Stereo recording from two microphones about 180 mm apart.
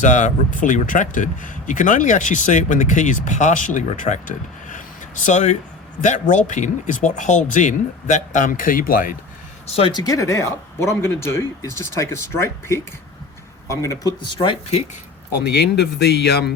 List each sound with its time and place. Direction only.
0.0 s speech: 40° left (ahead or behind)
5.2 s speech: 40° left (ahead or behind)
9.6 s speech: 30° left (ahead or behind)
15.4 s speech: 70° left (ahead or behind)